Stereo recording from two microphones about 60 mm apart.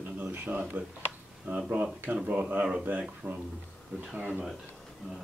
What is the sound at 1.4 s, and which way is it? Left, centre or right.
Speech, right.